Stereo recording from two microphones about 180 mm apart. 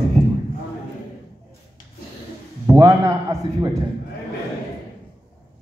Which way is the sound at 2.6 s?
15° right (ahead or behind).